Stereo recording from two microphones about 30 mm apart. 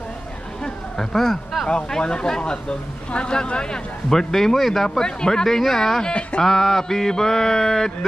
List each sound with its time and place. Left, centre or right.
0.9 s mantra: centre
1.9 s speech: left
4.1 s mantra: centre
4.8 s mantra: left